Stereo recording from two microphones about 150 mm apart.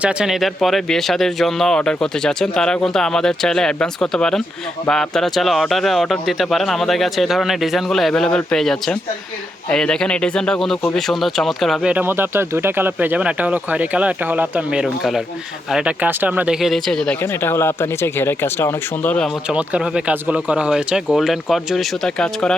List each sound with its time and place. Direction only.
0.0 s speech: 5° right (ahead or behind)
17.2 s speech: 15° left (ahead or behind)
19.5 s speech: 5° right (ahead or behind)